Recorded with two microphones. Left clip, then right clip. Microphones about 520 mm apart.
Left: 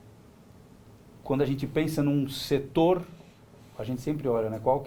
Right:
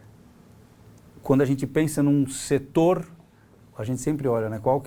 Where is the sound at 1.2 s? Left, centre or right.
Right.